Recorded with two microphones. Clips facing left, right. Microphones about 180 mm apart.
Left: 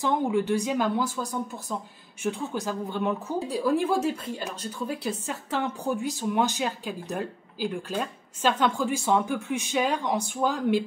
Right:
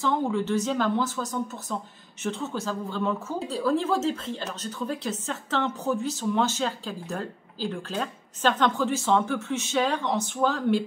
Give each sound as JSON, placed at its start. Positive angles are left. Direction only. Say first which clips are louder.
{"t": 0.0, "sound": "a woman's voice", "louder": "left 1 dB", "side_deg": 15}